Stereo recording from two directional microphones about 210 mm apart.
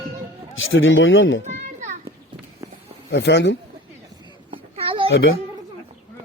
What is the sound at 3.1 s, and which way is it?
Speech, 55° left (ahead or behind).